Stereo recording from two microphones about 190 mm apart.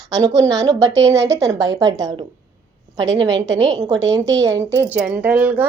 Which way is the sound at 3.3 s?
70° right (ahead or behind).